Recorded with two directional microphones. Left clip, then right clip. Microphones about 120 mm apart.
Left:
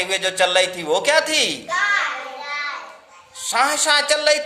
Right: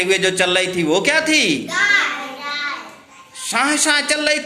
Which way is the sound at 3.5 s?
25° left (ahead or behind).